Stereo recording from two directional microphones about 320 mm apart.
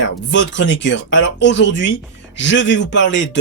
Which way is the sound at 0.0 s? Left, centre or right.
Left.